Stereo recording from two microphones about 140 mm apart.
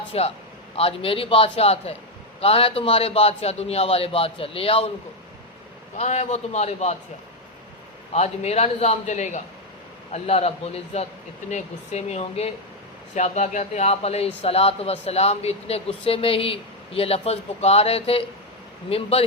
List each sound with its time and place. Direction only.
0.1 s a man's voice: 45° left (ahead or behind)
6.0 s speech: 55° left (ahead or behind)
8.1 s speech: 50° left (ahead or behind)